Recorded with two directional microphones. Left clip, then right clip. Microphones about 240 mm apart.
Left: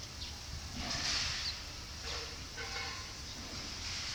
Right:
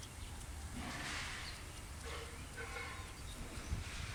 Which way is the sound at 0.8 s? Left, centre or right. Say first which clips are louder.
Left 8 dB; left.